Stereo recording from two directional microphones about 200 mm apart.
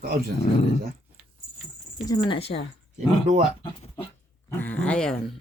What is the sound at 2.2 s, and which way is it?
Speech, 25° left (ahead or behind).